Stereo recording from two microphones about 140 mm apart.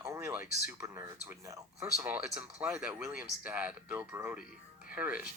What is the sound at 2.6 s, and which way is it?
Speech, 5° right (ahead or behind).